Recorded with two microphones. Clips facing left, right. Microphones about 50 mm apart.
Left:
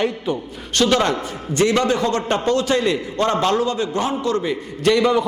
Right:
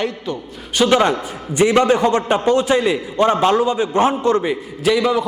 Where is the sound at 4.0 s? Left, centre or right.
Right.